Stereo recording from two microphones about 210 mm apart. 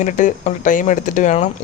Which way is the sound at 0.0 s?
35° left (ahead or behind).